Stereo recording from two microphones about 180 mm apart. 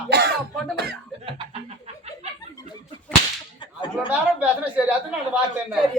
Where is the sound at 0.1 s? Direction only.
65° right (ahead or behind).